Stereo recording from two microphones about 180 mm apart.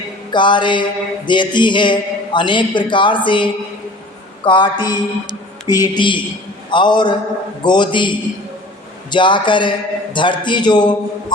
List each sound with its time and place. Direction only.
0.3 s mantra: 25° left (ahead or behind)